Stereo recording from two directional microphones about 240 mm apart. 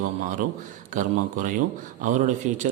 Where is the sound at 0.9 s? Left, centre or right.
Right.